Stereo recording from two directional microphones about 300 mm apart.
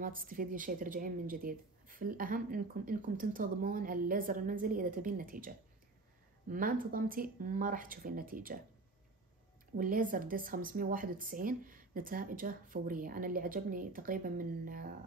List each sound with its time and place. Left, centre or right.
0.0 s a woman's voice: right
9.8 s a woman's voice: right